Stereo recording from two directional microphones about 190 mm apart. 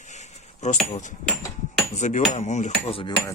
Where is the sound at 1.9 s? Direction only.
40° left (ahead or behind).